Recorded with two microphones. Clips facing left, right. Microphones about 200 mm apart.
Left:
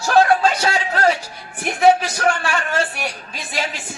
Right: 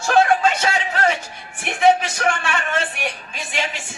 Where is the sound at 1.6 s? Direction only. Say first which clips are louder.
Left 2 dB; 35° left (ahead or behind).